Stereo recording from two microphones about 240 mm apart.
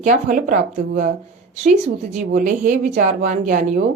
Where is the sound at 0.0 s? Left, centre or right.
Right.